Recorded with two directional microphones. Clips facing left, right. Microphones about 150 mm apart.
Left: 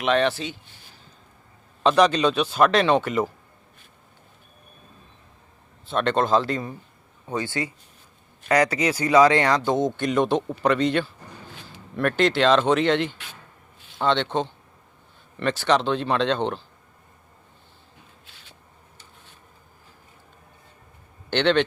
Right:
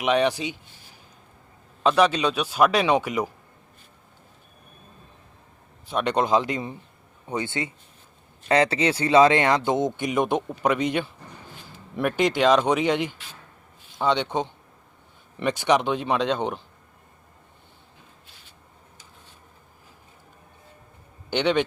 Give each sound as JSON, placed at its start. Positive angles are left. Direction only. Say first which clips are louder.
{"t": 0.0, "sound": "speech", "louder": "even", "side_deg": -15}
{"t": 1.8, "sound": "speech", "louder": "left 2 dB", "side_deg": -5}
{"t": 5.9, "sound": "speech", "louder": "left 1 dB", "side_deg": -15}
{"t": 21.2, "sound": "a man's voice", "louder": "left 2 dB", "side_deg": -10}